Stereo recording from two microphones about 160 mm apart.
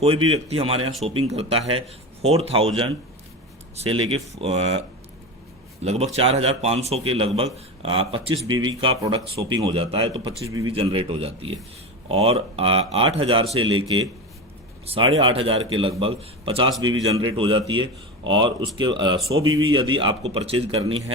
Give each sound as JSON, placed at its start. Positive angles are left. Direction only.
{"t": 0.0, "sound": "speech", "side_deg": -35}
{"t": 5.8, "sound": "speech", "side_deg": -40}